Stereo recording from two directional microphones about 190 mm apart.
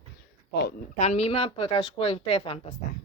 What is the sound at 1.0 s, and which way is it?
A woman's voice, 35° left (ahead or behind).